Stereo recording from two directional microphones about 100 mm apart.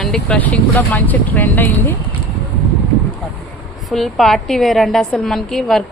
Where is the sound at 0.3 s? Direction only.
15° left (ahead or behind).